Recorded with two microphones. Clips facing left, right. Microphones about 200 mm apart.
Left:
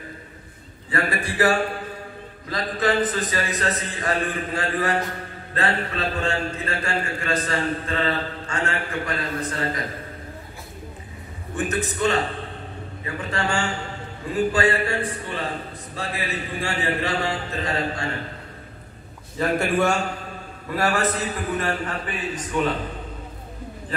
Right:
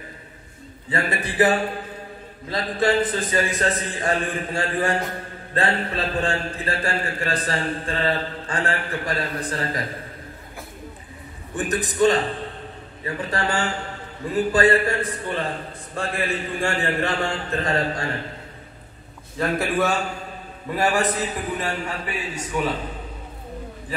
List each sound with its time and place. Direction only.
0.9 s a man's voice: 20° right (ahead or behind)
11.5 s a man's voice: 35° right (ahead or behind); by 18.0 s 50° right (ahead or behind)
19.3 s a man's voice: centre (ahead or behind)
20.7 s a man's voice: 15° right (ahead or behind)